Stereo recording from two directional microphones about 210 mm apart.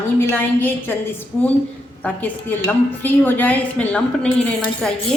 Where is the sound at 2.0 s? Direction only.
5° left (ahead or behind).